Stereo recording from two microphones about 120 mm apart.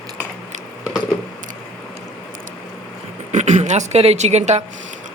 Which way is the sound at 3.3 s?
80° right.